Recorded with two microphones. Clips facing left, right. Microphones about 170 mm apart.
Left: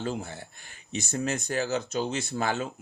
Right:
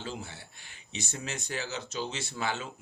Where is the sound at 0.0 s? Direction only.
50° left (ahead or behind).